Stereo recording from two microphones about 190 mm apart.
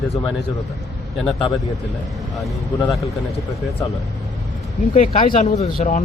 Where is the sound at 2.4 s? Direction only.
Centre (ahead or behind).